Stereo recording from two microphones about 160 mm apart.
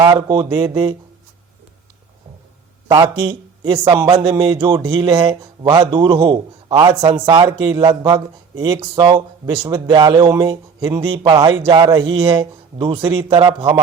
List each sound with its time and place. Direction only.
0.0 s speech: 25° right (ahead or behind)
2.9 s speech: 30° right (ahead or behind)